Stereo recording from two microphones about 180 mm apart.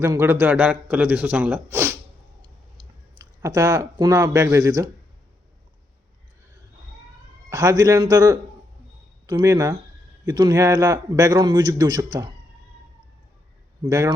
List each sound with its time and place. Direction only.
0.0 s a man's voice: 15° right (ahead or behind)
3.2 s a man's voice: 20° right (ahead or behind)
7.5 s a man's voice: 20° right (ahead or behind)